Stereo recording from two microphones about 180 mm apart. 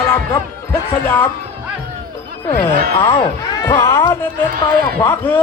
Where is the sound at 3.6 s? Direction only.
15° left (ahead or behind).